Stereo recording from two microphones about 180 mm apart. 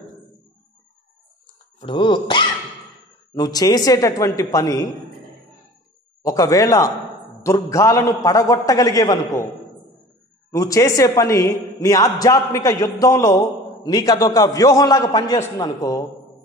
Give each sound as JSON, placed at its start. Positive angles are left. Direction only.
{"t": 1.9, "sound": "a man's voice", "side_deg": 25}
{"t": 6.2, "sound": "a man's voice", "side_deg": 20}
{"t": 10.5, "sound": "a man's voice", "side_deg": 15}